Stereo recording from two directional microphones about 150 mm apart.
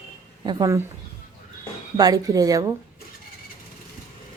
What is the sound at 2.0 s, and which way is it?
Speech, 25° right (ahead or behind).